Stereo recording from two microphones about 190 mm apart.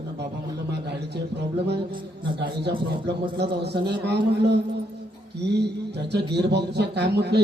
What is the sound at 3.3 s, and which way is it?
Speech, 60° right (ahead or behind).